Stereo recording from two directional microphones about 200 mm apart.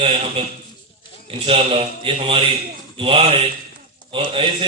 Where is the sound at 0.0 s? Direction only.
30° right (ahead or behind).